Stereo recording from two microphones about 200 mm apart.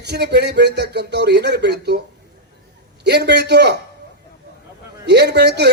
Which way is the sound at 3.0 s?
55° right (ahead or behind).